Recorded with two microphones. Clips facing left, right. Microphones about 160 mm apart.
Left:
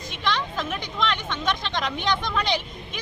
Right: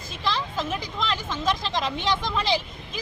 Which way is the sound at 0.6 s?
30° right (ahead or behind).